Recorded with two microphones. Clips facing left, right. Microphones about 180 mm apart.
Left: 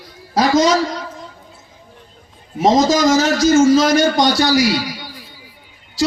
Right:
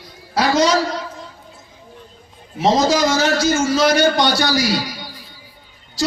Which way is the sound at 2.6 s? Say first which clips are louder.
Left 2 dB; 45° left (ahead or behind).